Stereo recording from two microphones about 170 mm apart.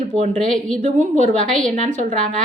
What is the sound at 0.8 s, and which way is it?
A woman's voice, 45° right (ahead or behind).